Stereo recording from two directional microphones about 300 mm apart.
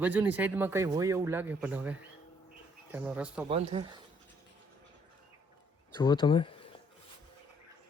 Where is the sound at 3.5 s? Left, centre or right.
Centre.